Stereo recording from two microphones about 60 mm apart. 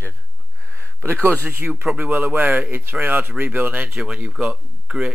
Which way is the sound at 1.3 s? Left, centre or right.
Right.